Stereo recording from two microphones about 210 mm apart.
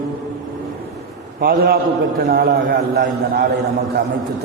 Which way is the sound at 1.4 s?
45° right (ahead or behind).